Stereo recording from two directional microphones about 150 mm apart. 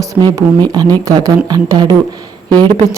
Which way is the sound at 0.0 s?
25° right (ahead or behind).